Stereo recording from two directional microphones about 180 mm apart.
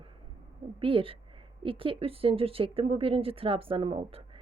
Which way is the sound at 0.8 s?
30° right (ahead or behind).